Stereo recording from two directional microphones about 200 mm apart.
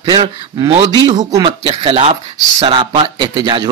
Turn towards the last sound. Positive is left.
turn(degrees=-25)  # may be behind; listen again after turning